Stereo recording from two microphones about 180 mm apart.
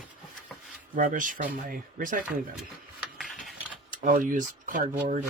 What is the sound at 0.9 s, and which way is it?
Speech, 45° right (ahead or behind).